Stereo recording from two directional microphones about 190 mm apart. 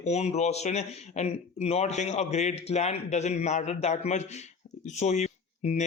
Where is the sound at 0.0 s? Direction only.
35° left (ahead or behind).